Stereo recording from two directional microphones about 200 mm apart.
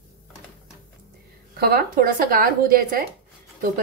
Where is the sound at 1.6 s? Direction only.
50° right (ahead or behind).